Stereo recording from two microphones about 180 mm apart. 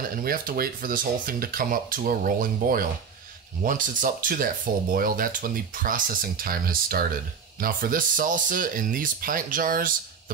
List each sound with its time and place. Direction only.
0.1 s speech: 55° right (ahead or behind)